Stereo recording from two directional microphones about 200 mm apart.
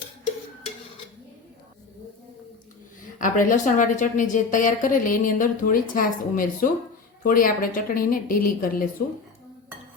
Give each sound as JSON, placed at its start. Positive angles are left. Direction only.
{"t": 3.2, "sound": "a woman's voice", "side_deg": 40}